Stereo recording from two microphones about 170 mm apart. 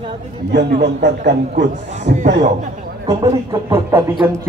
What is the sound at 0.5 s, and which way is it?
A man's voice, 80° right.